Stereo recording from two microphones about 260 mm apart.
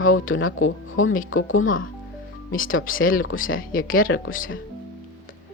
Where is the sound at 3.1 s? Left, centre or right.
Left.